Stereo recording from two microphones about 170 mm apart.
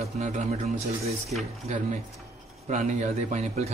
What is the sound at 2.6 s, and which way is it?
Speech, 45° right (ahead or behind).